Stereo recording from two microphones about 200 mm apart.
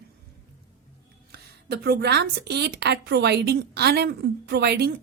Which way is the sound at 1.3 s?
55° right (ahead or behind).